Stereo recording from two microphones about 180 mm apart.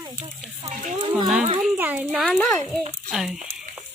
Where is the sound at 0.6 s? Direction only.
40° right (ahead or behind).